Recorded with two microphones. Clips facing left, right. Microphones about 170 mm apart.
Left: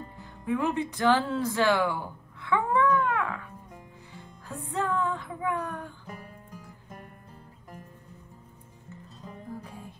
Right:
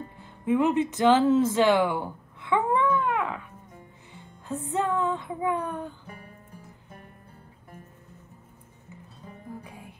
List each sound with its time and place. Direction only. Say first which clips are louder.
0.2 s speech: right 5 dB; 20° right (ahead or behind)
4.5 s speech: right 3 dB; 25° right (ahead or behind)
9.6 s music: left 1 dB; 10° right (ahead or behind)